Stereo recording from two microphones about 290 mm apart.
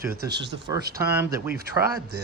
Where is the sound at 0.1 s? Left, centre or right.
Right.